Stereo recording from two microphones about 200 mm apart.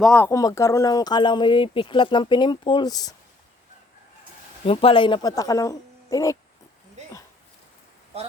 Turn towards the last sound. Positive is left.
turn(degrees=15)  # may be behind; listen again after turning